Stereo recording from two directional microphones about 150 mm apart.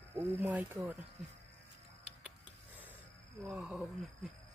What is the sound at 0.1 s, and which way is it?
Speech, 15° right (ahead or behind).